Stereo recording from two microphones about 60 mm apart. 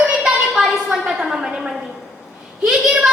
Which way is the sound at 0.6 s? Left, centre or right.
Centre.